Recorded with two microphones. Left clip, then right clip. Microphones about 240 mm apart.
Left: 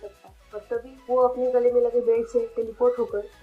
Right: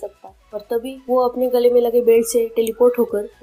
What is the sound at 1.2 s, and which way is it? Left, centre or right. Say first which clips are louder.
A woman's voice: right 4 dB; right.